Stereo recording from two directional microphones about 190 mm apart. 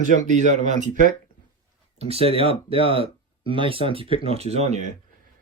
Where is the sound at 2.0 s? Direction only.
30° right (ahead or behind).